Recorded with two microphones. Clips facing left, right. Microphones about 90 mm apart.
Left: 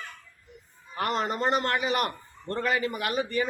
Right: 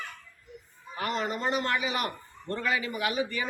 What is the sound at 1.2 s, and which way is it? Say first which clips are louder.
Speech: left 3 dB; 35° left (ahead or behind).